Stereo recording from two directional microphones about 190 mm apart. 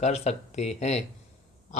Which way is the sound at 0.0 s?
35° left (ahead or behind).